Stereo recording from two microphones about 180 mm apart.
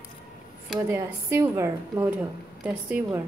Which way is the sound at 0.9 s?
15° right (ahead or behind).